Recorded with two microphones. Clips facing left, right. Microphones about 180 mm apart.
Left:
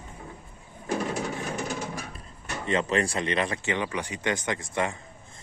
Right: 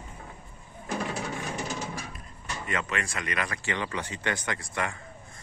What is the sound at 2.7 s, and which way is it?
Speech, 30° left (ahead or behind).